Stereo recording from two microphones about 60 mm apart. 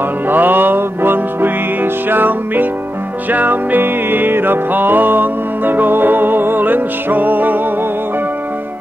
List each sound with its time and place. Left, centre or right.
0.3 s music: right